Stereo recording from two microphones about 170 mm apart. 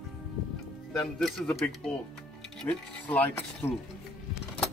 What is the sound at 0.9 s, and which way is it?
Speech, centre (ahead or behind).